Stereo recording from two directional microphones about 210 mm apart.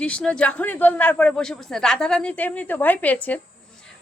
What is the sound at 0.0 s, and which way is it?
A man's voice, 5° left (ahead or behind).